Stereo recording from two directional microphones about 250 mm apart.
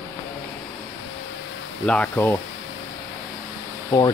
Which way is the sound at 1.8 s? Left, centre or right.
Centre.